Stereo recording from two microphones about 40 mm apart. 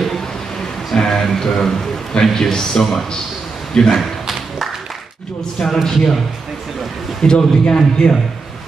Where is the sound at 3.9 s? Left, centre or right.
Centre.